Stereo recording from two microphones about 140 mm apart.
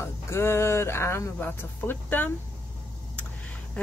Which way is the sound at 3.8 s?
10° left (ahead or behind).